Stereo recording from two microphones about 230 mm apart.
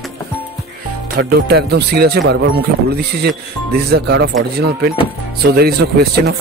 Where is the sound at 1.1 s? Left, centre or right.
Right.